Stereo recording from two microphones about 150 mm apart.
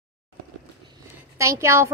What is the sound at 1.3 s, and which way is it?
Speech, 20° right (ahead or behind).